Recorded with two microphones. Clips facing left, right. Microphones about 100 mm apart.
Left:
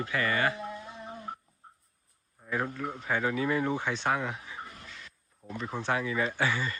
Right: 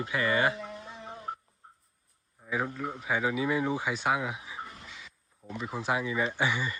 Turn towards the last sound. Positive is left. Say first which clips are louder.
# even
turn(degrees=-15)  # may be behind; listen again after turning